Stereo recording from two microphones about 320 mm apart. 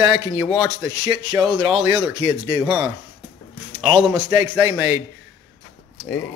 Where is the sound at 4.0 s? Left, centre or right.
Centre.